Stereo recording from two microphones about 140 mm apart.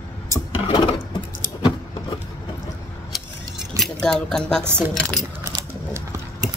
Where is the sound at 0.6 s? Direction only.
35° left (ahead or behind).